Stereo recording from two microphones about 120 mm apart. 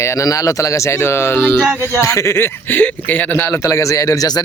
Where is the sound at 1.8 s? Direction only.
25° left (ahead or behind).